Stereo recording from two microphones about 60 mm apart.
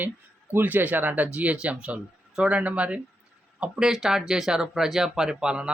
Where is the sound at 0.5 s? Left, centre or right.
Right.